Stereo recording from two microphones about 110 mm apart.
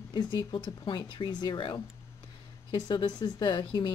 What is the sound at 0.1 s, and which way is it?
Speech, 40° left (ahead or behind).